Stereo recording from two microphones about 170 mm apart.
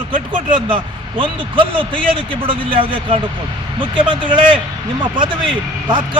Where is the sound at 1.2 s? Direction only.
30° right (ahead or behind).